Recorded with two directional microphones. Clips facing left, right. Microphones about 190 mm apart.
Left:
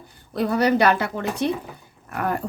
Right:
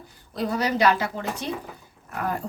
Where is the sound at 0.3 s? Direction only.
55° left (ahead or behind).